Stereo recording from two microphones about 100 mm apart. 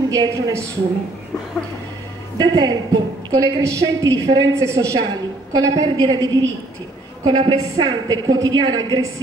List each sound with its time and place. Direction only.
0.1 s a woman's voice: 35° right (ahead or behind)
2.3 s a woman's voice: 45° right (ahead or behind)
7.2 s a woman's voice: 50° right (ahead or behind)
7.7 s a woman's voice: 35° right (ahead or behind)